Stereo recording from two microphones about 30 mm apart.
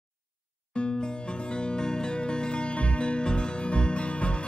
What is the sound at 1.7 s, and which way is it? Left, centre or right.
Music, left.